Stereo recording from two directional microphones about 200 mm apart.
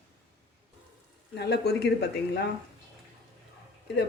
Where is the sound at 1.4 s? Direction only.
55° left (ahead or behind).